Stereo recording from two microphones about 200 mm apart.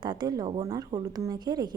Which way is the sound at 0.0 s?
20° right (ahead or behind).